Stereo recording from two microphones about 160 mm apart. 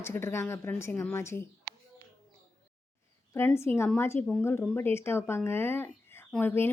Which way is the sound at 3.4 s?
15° left (ahead or behind).